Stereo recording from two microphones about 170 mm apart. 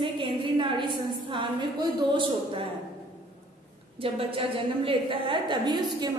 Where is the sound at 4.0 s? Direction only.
35° right (ahead or behind).